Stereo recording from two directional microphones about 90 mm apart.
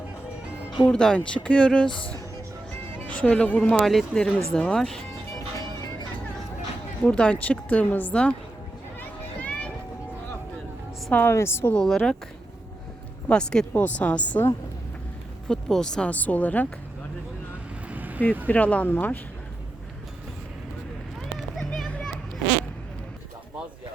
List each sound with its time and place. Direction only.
0.9 s a woman's voice: 10° left (ahead or behind)
1.9 s speech: 70° left (ahead or behind)
3.1 s a woman's voice: 15° left (ahead or behind)
5.4 s music: 40° left (ahead or behind)
7.0 s a woman's voice: 10° left (ahead or behind)
9.0 s a sound: 15° left (ahead or behind)
11.1 s speech: 25° left (ahead or behind)
11.7 s a woman's voice: 5° left (ahead or behind)
13.2 s a woman's voice: 10° left (ahead or behind)
15.4 s a woman's voice: 5° left (ahead or behind)
17.8 s vehicle: 20° right (ahead or behind)
18.4 s a woman's voice: 15° left (ahead or behind)
21.3 s a sound: centre (ahead or behind)